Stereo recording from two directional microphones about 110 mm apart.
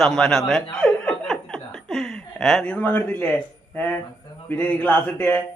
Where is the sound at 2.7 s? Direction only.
15° left (ahead or behind).